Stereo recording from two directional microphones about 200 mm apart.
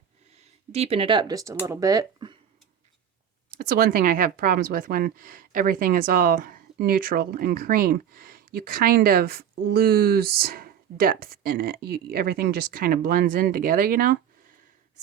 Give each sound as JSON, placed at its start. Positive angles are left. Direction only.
{"t": 0.7, "sound": "speech", "side_deg": -30}
{"t": 3.6, "sound": "speech", "side_deg": -45}